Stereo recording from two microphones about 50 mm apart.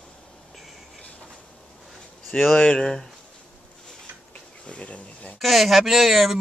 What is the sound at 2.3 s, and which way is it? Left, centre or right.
Speech, centre.